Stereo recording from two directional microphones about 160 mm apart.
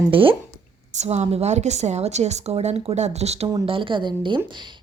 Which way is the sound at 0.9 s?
45° right (ahead or behind).